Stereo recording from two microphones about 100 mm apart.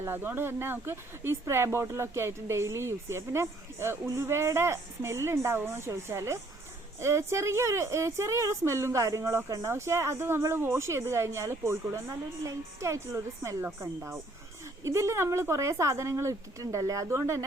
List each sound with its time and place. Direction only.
0.0 s a woman's voice: 20° right (ahead or behind)